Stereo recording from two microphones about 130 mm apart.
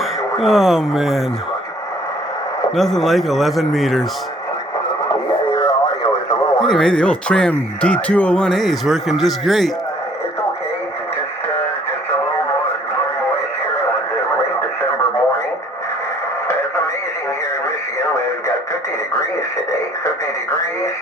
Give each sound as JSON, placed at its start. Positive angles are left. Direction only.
{"t": 0.3, "sound": "speech", "side_deg": 0}
{"t": 2.7, "sound": "speech", "side_deg": 0}
{"t": 5.0, "sound": "radio", "side_deg": 30}
{"t": 6.7, "sound": "speech", "side_deg": 5}